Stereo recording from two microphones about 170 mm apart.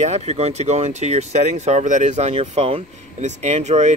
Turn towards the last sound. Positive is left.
turn(degrees=-40)  # may be behind; listen again after turning